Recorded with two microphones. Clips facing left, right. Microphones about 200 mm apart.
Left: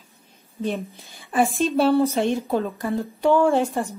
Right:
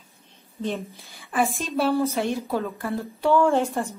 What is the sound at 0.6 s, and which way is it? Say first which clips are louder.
Speech: left 2 dB; 15° left (ahead or behind).